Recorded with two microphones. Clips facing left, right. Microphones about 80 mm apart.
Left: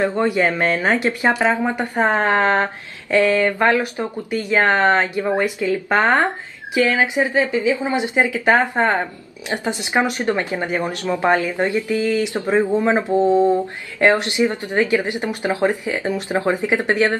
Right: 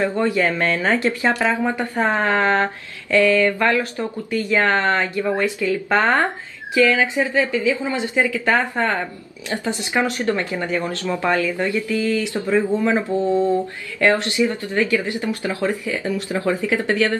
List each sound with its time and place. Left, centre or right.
0.0 s speech: left